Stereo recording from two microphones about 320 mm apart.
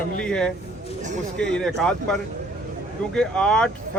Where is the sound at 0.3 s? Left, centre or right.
Centre.